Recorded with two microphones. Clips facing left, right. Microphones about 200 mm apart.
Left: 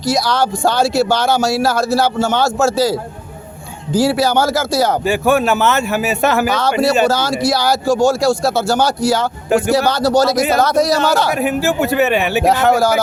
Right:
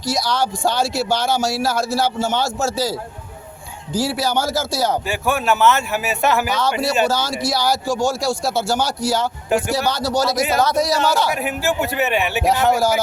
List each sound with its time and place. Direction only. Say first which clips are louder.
0.8 s a man's voice: left 7 dB; 70° left (ahead or behind)
5.0 s a man's voice: left 6 dB; 40° left (ahead or behind)
6.6 s a man's voice: left 5 dB; 65° left (ahead or behind)
11.3 s a man's voice: left 5 dB; 40° left (ahead or behind)
12.5 s a man's voice: left 3 dB; 65° left (ahead or behind)